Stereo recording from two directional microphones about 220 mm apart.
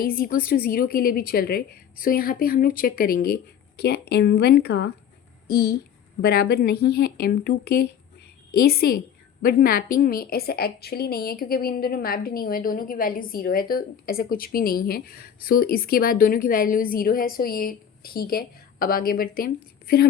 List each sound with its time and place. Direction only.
0.0 s a woman's voice: 40° left (ahead or behind)